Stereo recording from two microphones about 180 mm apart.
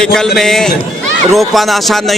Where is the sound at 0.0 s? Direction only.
5° left (ahead or behind).